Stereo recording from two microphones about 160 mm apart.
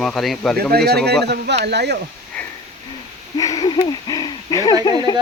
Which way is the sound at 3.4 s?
20° left (ahead or behind).